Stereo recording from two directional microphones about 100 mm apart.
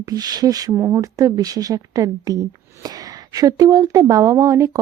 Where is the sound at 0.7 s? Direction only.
25° right (ahead or behind).